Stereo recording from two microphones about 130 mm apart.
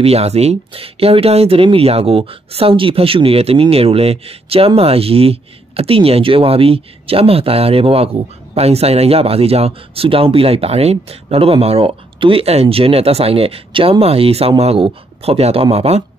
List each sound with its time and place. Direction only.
0.0 s speech: 55° right (ahead or behind)